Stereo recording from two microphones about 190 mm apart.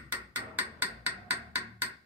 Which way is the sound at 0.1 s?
10° right (ahead or behind).